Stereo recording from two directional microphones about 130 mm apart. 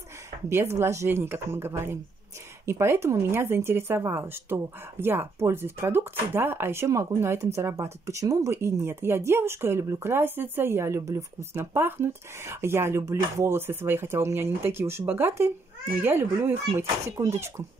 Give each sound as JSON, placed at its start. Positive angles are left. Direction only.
{"t": 0.5, "sound": "speech", "side_deg": -20}